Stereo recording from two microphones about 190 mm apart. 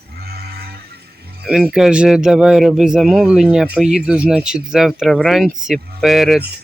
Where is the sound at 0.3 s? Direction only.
55° right (ahead or behind).